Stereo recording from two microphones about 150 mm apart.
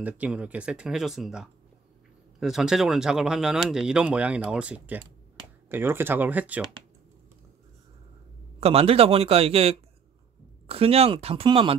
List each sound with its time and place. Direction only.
0.0 s speech: 10° right (ahead or behind)
8.5 s a man's voice: 40° right (ahead or behind)